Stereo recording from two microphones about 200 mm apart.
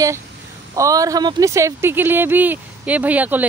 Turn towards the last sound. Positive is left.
turn(degrees=-10)  # may be behind; listen again after turning